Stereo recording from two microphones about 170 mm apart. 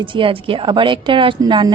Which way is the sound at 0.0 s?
30° right (ahead or behind).